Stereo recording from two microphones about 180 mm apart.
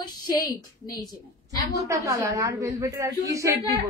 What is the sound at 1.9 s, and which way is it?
A woman's voice, 15° right (ahead or behind).